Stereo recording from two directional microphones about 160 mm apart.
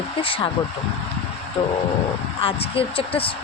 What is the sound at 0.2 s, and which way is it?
Speech, 35° left (ahead or behind).